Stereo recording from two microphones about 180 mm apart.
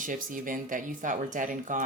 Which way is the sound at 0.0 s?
50° right (ahead or behind).